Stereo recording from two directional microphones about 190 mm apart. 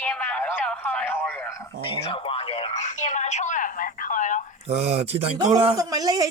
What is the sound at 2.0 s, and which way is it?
Telephone, 25° left (ahead or behind).